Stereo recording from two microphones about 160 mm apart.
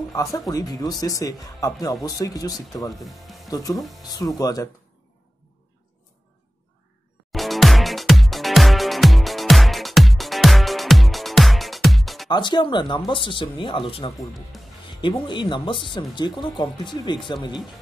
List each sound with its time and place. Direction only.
0.1 s speech: 20° left (ahead or behind)
2.9 s speech: centre (ahead or behind)
3.4 s speech: 20° left (ahead or behind)
3.7 s speech: centre (ahead or behind)
4.4 s speech: 20° left (ahead or behind)
7.3 s music: centre (ahead or behind)
12.3 s speech: 30° left (ahead or behind)
14.1 s speech: centre (ahead or behind)
14.9 s speech: 30° left (ahead or behind)